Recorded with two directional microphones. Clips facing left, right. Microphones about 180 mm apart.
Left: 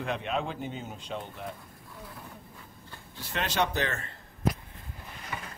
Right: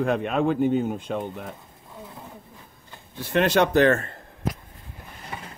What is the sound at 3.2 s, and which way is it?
A man's voice, 55° right (ahead or behind).